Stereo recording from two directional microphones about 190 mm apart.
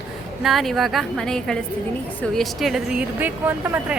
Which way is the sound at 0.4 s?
Centre (ahead or behind).